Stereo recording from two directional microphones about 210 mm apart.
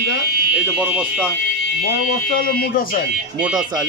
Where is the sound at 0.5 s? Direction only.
5° right (ahead or behind).